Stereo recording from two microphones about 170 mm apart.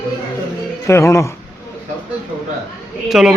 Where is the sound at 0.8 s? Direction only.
15° left (ahead or behind).